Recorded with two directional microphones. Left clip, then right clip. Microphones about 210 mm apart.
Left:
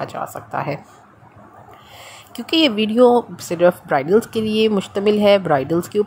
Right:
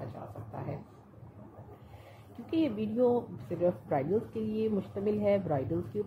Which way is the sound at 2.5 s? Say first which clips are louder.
Left 15 dB; 45° left (ahead or behind).